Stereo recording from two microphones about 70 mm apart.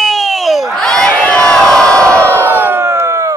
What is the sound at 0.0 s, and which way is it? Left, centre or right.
Crowd, centre.